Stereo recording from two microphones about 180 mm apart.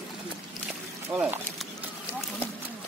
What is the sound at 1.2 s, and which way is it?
Speech, 5° right (ahead or behind).